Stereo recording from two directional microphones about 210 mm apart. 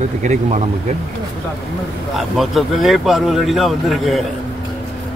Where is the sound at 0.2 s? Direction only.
30° right (ahead or behind).